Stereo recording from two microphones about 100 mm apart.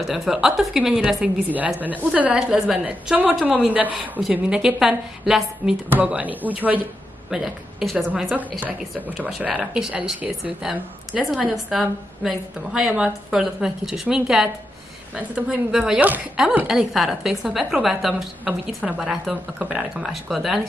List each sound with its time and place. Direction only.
0.0 s a woman's voice: 5° right (ahead or behind)
1.2 s speech: 15° right (ahead or behind)
5.9 s speech: 15° right (ahead or behind)
7.2 s a woman's voice: 5° right (ahead or behind)
8.6 s a woman's voice: 15° right (ahead or behind)